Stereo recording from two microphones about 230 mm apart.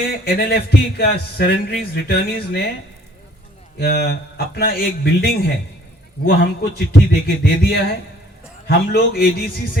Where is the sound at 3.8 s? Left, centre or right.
Left.